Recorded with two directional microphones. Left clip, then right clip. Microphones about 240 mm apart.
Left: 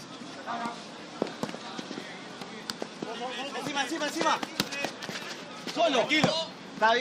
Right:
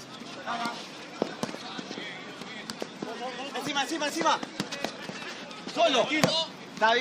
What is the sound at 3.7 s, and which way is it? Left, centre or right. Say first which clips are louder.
Speech: right 2 dB; centre.